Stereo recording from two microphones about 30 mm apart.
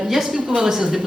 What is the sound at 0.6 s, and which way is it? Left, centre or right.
Speech, centre.